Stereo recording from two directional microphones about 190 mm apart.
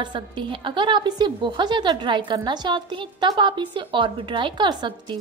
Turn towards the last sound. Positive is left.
turn(degrees=-25)  # may be behind; listen again after turning